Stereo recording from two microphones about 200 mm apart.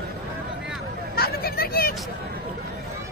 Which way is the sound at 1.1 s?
50° left (ahead or behind).